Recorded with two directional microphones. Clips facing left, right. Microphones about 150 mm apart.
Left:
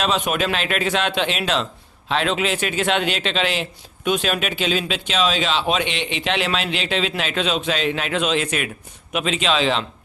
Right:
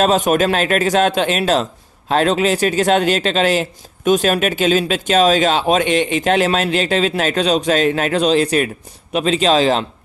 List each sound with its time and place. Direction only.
0.0 s a man's voice: 45° right (ahead or behind)